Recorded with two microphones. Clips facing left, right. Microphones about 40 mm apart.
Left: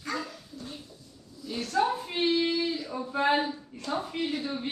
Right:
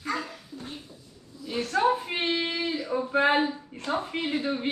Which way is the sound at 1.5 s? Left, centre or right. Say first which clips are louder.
Right 4 dB; right.